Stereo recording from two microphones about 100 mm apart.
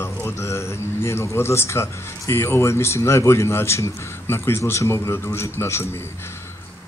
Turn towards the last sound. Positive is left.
turn(degrees=25)  # may be behind; listen again after turning